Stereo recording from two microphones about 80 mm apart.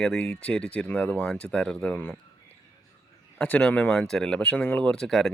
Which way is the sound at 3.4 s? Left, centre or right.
Centre.